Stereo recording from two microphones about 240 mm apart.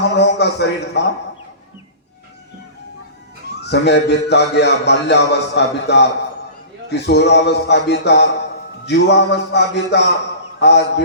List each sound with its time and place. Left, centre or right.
0.2 s a man's voice: left
3.6 s a man's voice: left